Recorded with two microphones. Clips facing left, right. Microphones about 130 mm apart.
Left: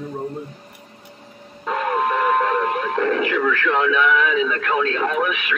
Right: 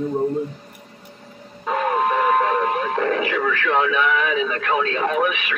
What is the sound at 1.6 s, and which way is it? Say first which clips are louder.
Radio: right 1 dB; 20° right (ahead or behind).